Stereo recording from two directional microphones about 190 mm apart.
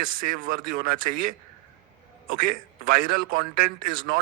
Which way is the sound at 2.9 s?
50° right (ahead or behind).